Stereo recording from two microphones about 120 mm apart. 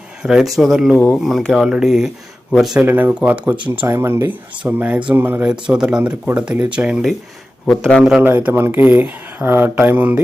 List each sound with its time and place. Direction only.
0.2 s speech: 5° right (ahead or behind)
0.9 s speech: 10° left (ahead or behind)
2.8 s speech: 15° right (ahead or behind)
7.7 s speech: 5° left (ahead or behind)
8.2 s speech: 15° right (ahead or behind)